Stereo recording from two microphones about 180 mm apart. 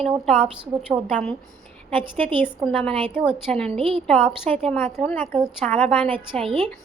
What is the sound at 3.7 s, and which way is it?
Speech, 35° right (ahead or behind).